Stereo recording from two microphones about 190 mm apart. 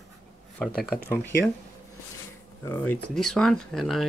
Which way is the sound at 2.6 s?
10° left (ahead or behind).